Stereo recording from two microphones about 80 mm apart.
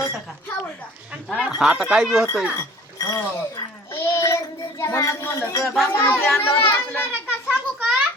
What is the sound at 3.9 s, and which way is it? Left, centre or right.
Child singing, left.